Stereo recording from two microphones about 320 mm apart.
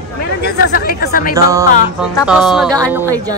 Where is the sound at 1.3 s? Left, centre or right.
Centre.